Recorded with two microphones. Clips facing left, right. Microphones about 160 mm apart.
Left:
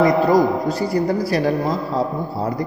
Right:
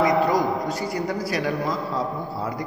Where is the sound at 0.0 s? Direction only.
35° left (ahead or behind).